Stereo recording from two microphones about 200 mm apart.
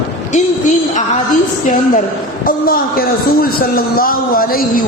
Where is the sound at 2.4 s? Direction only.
45° left (ahead or behind).